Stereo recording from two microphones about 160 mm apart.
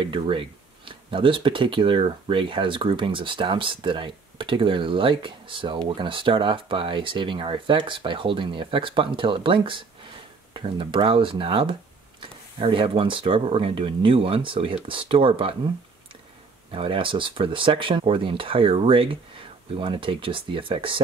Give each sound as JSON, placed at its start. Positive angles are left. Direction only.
{"t": 0.0, "sound": "speech", "side_deg": -30}
{"t": 16.7, "sound": "speech", "side_deg": -35}